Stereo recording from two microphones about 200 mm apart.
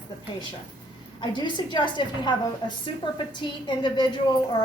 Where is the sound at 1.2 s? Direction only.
25° left (ahead or behind).